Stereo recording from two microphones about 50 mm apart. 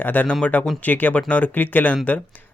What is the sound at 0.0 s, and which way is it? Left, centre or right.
Speech, left.